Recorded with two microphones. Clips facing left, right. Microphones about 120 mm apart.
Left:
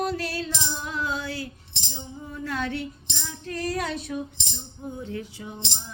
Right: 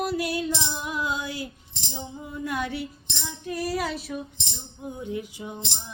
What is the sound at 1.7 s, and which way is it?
Music, 75° left (ahead or behind).